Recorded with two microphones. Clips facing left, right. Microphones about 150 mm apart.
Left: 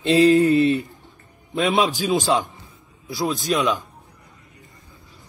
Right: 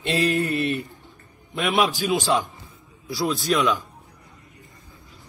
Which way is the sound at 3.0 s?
20° left (ahead or behind).